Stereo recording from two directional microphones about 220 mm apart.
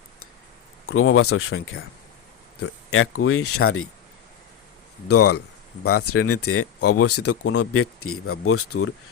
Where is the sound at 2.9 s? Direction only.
75° left (ahead or behind).